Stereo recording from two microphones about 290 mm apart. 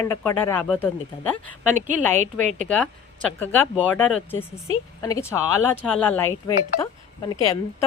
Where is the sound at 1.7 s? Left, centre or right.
Right.